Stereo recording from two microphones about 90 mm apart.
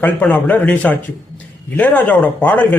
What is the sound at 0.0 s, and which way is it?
Speech, 15° left (ahead or behind).